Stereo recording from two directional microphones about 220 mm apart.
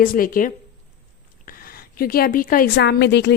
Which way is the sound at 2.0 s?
40° left (ahead or behind).